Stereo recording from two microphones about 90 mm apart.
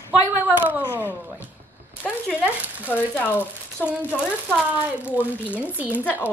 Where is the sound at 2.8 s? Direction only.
20° left (ahead or behind).